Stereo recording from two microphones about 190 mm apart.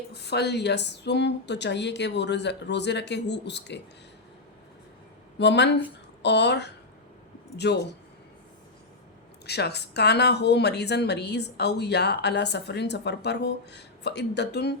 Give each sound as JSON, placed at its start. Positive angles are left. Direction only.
{"t": 0.1, "sound": "speech", "side_deg": 60}
{"t": 5.4, "sound": "speech", "side_deg": 65}
{"t": 9.5, "sound": "speech", "side_deg": 60}